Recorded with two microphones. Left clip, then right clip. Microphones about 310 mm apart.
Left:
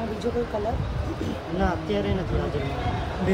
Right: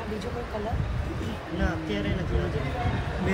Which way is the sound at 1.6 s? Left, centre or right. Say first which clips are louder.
Left 5 dB; left.